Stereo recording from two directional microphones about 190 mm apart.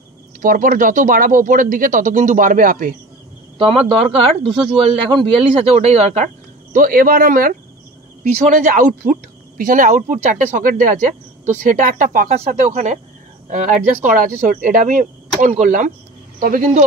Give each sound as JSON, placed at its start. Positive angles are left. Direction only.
{"t": 0.4, "sound": "speech", "side_deg": -45}
{"t": 3.5, "sound": "speech", "side_deg": -30}